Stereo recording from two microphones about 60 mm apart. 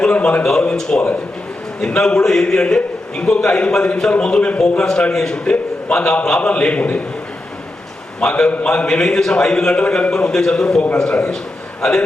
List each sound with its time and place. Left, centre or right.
0.0 s a man's voice: centre
8.2 s a man's voice: centre